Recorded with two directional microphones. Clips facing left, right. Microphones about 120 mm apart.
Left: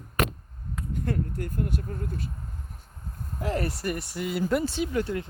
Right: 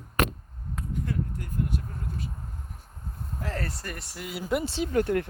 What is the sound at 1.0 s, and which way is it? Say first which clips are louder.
Speech: left 6 dB; 60° left (ahead or behind).